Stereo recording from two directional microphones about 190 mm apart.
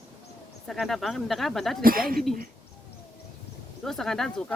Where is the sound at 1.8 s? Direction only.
50° right (ahead or behind).